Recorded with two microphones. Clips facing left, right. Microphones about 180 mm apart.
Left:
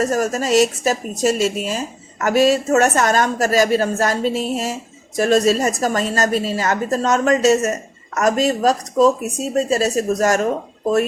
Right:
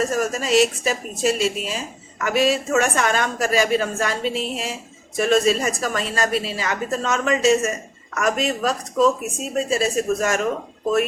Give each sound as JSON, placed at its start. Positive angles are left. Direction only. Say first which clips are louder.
{"t": 0.0, "sound": "speech", "louder": "left 3 dB", "side_deg": 40}